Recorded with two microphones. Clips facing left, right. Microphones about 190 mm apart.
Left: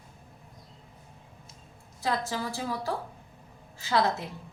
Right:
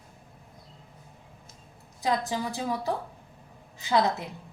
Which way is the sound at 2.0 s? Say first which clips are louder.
Right 2 dB; 15° right (ahead or behind).